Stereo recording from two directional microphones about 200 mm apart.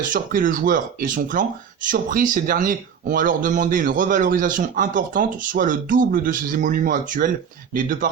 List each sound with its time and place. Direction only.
0.0 s speech: 40° right (ahead or behind)